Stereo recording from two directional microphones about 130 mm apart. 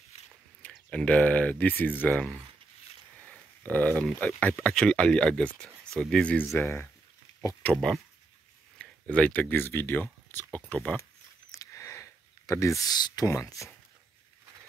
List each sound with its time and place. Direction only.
0.6 s speech: 10° left (ahead or behind)
3.3 s a sound: 10° left (ahead or behind)
4.4 s speech: 10° left (ahead or behind)
7.7 s speech: centre (ahead or behind)
11.5 s a sound: 25° left (ahead or behind)
12.8 s speech: 30° left (ahead or behind)